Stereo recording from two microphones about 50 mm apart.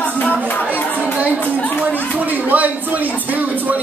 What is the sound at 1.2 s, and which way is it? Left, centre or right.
Speech, right.